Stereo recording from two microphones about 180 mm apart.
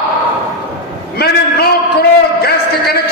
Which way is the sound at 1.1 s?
60° left (ahead or behind).